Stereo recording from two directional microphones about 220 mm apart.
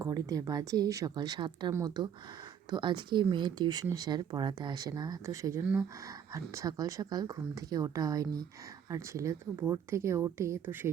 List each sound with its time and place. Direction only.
0.0 s speech: 15° right (ahead or behind)